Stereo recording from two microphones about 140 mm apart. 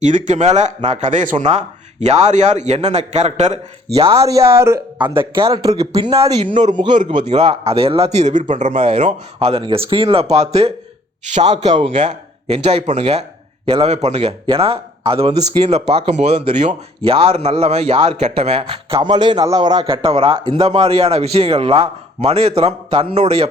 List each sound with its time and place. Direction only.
0.0 s speech: 60° right (ahead or behind); by 4.3 s 45° right (ahead or behind)
4.3 s a man's voice: 20° right (ahead or behind)
4.9 s a man's voice: 35° right (ahead or behind)
6.7 s speech: 35° right (ahead or behind)
7.3 s a man's voice: 45° right (ahead or behind); by 8.8 s 60° right (ahead or behind)
8.8 s a man's voice: 40° right (ahead or behind)
11.7 s a man's voice: 40° right (ahead or behind)
19.1 s a man's voice: 30° right (ahead or behind)
20.1 s a man's voice: 40° right (ahead or behind)